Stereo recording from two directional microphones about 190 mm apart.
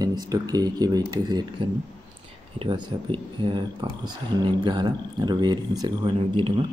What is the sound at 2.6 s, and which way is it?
Speech, 25° right (ahead or behind).